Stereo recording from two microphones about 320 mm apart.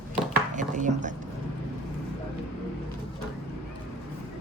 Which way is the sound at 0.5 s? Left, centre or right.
Right.